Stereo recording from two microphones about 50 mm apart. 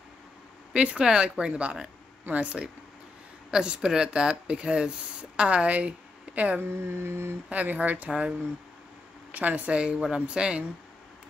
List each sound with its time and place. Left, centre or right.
0.7 s speech: centre
6.6 s speech: right
7.4 s speech: right
9.3 s speech: right